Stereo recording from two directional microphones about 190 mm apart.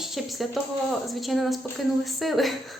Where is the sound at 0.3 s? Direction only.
Centre (ahead or behind).